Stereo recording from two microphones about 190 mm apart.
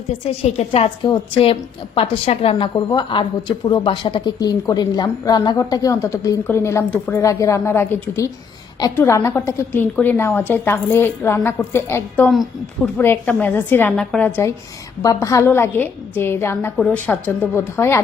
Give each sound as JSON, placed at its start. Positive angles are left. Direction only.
{"t": 0.3, "sound": "a woman's voice", "side_deg": 35}
{"t": 12.3, "sound": "a woman's voice", "side_deg": 0}
{"t": 13.0, "sound": "a woman's voice", "side_deg": 10}